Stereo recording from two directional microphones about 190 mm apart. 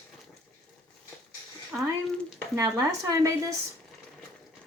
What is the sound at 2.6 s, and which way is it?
Speech, 15° right (ahead or behind).